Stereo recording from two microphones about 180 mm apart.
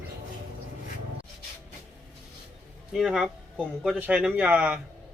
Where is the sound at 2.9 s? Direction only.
Centre (ahead or behind).